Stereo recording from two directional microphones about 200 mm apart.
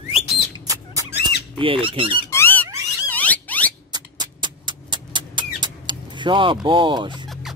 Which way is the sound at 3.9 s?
20° right (ahead or behind).